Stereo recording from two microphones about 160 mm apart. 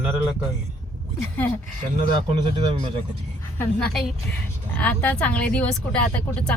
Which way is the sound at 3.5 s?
5° left (ahead or behind).